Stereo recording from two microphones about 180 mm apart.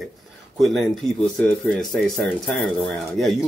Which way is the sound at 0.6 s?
Centre (ahead or behind).